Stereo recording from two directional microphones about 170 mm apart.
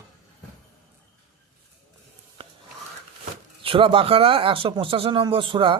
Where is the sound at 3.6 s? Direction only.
30° right (ahead or behind).